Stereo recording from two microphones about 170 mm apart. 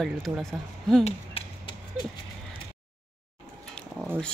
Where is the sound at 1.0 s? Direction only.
35° left (ahead or behind).